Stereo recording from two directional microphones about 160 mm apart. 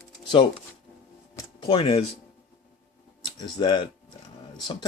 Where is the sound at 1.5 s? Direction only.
30° left (ahead or behind).